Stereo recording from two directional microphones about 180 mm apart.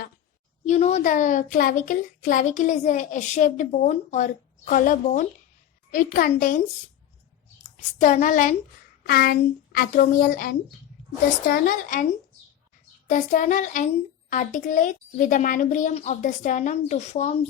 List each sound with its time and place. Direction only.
0.6 s a woman's voice: 40° left (ahead or behind)
7.6 s a woman's voice: 45° left (ahead or behind)
9.0 s a woman's voice: 55° left (ahead or behind)
13.1 s a woman's voice: 45° left (ahead or behind)